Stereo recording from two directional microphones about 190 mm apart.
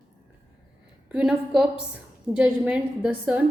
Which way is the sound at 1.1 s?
5° right (ahead or behind).